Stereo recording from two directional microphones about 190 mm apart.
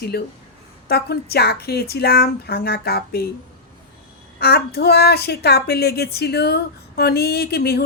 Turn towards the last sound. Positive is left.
turn(degrees=60)  # may be behind; listen again after turning